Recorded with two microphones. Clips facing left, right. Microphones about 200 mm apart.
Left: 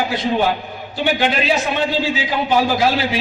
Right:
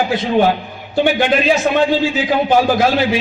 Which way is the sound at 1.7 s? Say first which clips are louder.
Right 5 dB; 50° right (ahead or behind).